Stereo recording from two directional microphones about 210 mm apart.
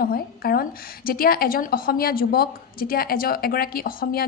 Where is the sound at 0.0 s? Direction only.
45° left (ahead or behind).